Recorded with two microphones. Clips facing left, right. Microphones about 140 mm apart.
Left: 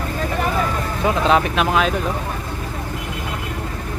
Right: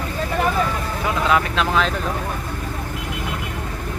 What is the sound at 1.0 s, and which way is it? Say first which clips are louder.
Speech: left 3 dB; 25° left (ahead or behind).